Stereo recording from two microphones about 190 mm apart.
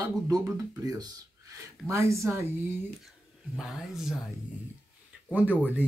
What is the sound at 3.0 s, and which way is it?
Speech, centre (ahead or behind).